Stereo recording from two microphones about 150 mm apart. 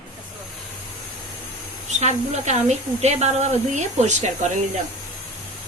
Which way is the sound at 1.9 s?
50° right (ahead or behind).